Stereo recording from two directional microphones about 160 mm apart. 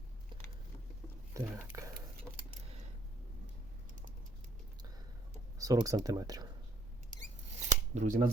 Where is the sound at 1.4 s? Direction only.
20° right (ahead or behind).